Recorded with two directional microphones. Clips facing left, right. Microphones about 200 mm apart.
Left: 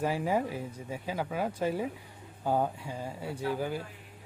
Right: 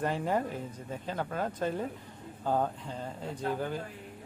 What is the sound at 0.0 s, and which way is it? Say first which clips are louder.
Speech: left 1 dB; 10° left (ahead or behind).